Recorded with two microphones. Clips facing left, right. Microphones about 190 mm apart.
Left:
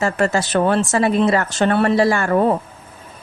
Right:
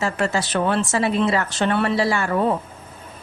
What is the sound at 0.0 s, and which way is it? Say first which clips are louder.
A woman's voice: left 4 dB; 45° left (ahead or behind).